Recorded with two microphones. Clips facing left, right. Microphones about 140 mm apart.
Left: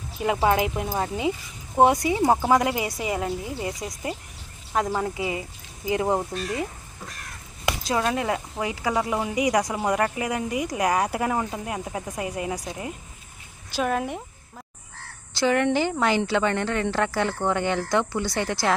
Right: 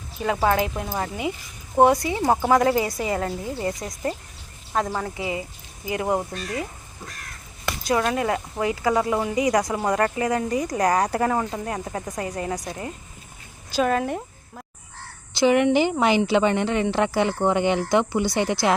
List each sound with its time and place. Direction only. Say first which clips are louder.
0.4 s speech: even; 20° left (ahead or behind)
5.2 s speech: even; 25° right (ahead or behind)
5.8 s speech: left 1 dB; 25° left (ahead or behind)
6.1 s speech: even; 5° left (ahead or behind)
7.6 s speech: right 2 dB; 15° left (ahead or behind)
13.7 s speech: right 3 dB; centre (ahead or behind)
15.4 s speech: right 4 dB; 15° right (ahead or behind)